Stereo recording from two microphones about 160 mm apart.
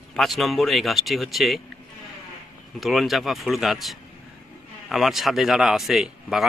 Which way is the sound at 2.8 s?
Centre (ahead or behind).